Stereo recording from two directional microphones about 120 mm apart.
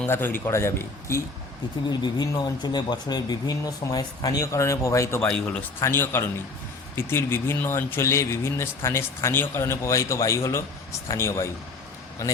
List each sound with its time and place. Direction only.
0.0 s speech: 15° left (ahead or behind)
1.9 s speech: 35° left (ahead or behind)
5.2 s speech: 10° left (ahead or behind)
5.8 s speech: 20° left (ahead or behind)